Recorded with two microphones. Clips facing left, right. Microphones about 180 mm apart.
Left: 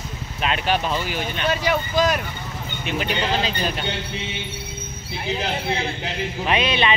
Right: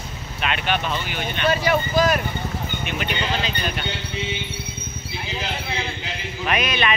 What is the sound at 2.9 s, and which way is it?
Speech, 30° left (ahead or behind).